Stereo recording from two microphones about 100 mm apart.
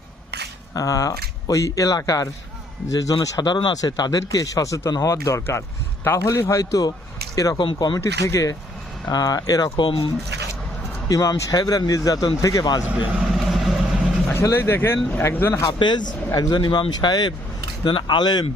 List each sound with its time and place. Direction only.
0.7 s speech: 35° left (ahead or behind)
8.0 s speech: 30° left (ahead or behind)
9.7 s speech: 60° left (ahead or behind)
11.1 s speech: 35° left (ahead or behind)
13.5 s vehicle: centre (ahead or behind)
14.3 s speech: 25° left (ahead or behind)
15.6 s speech: 50° left (ahead or behind)